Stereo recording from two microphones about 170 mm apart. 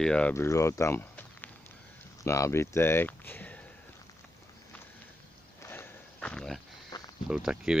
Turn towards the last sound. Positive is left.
turn(degrees=-5)  # may be behind; listen again after turning